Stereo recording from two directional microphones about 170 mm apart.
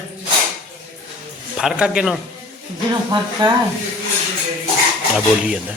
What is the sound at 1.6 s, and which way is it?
Speech, 5° right (ahead or behind).